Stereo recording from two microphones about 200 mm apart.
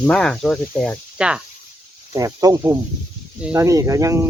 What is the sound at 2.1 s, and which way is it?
Speech, 20° right (ahead or behind).